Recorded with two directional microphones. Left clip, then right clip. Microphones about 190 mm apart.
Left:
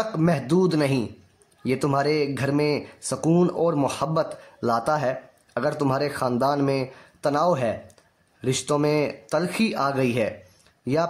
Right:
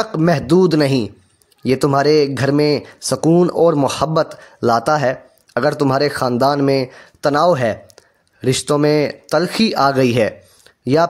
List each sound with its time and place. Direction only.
0.0 s speech: 35° right (ahead or behind)